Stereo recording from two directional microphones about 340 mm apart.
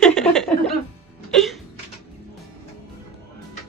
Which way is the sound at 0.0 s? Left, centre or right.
Centre.